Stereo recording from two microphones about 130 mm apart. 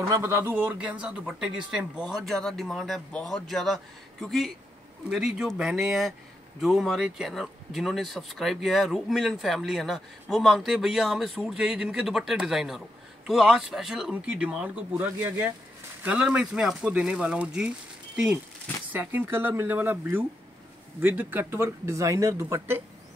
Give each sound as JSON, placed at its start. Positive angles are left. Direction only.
{"t": 0.1, "sound": "speech", "side_deg": -20}